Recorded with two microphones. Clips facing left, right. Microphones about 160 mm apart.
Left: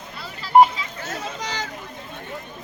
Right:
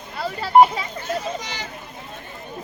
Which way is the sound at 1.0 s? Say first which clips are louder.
Right 3 dB; 90° left.